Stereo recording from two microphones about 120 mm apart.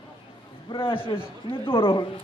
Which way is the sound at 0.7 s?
45° left (ahead or behind).